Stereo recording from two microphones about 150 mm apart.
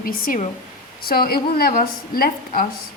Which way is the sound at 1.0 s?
80° left.